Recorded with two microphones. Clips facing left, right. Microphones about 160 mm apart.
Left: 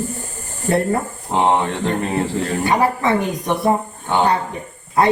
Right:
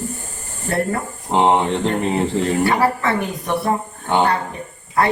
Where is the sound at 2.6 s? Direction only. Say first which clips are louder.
Left 1 dB; 20° left (ahead or behind).